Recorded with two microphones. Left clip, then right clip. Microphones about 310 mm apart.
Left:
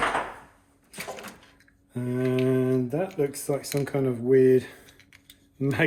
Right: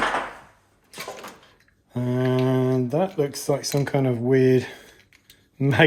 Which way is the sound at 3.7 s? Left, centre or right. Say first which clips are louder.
Right 3 dB; right.